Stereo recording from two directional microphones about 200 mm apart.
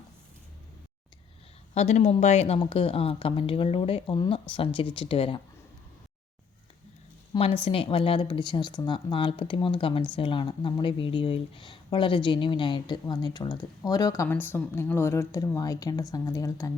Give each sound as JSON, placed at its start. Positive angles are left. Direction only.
{"t": 1.7, "sound": "speech", "side_deg": 35}
{"t": 7.3, "sound": "a woman's voice", "side_deg": 30}